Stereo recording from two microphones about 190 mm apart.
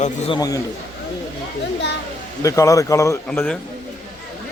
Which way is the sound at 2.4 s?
15° left (ahead or behind).